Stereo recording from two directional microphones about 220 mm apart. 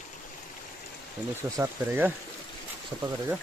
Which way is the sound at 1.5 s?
10° right (ahead or behind).